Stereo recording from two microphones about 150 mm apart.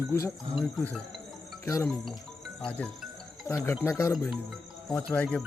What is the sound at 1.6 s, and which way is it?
Speech, 20° left (ahead or behind).